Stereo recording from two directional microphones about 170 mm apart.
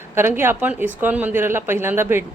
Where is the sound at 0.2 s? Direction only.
15° right (ahead or behind).